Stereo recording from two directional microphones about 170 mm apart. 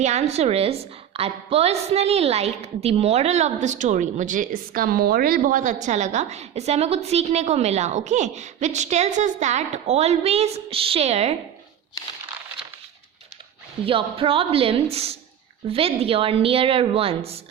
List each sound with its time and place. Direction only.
0.0 s a woman's voice: 40° right (ahead or behind)
13.8 s a woman's voice: 30° right (ahead or behind)